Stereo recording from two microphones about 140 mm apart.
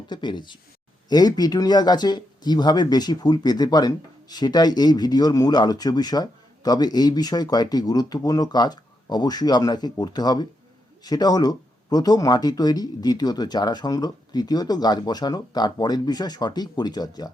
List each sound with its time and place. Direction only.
0.1 s speech: 35° left (ahead or behind)